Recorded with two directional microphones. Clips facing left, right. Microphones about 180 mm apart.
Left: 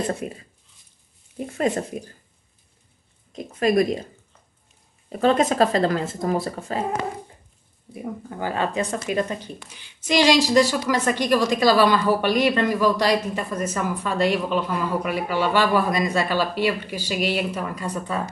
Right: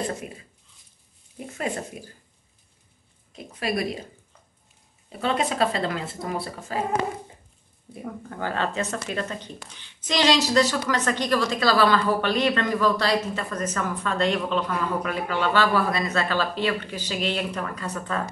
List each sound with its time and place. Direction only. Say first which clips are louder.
1.4 s speech: left 6 dB; 40° left (ahead or behind)
3.3 s speech: left 8 dB; 45° left (ahead or behind)
5.2 s speech: left 6 dB; 45° left (ahead or behind)
7.9 s a woman's voice: left 3 dB; 10° left (ahead or behind)